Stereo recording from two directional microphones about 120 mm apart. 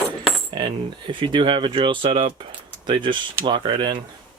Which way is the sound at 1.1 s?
40° right (ahead or behind).